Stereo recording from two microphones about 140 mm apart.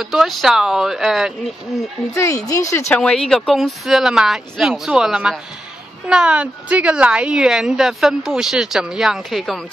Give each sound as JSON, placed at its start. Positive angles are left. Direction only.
{"t": 0.0, "sound": "a woman's voice", "side_deg": 0}
{"t": 2.1, "sound": "speech", "side_deg": 20}
{"t": 2.9, "sound": "a woman's voice", "side_deg": 5}